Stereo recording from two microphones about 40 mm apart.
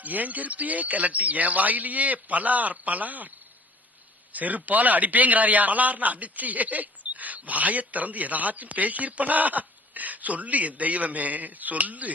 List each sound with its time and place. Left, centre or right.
0.0 s a man's voice: right
4.3 s a man's voice: right